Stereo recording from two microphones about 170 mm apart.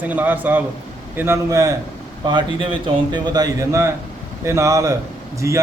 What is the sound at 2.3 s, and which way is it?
A man's voice, 30° right (ahead or behind).